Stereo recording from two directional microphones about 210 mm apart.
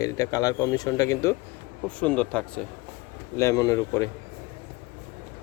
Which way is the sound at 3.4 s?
15° left (ahead or behind).